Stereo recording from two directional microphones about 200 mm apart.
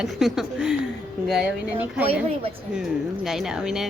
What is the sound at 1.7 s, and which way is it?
A woman's voice, 10° right (ahead or behind).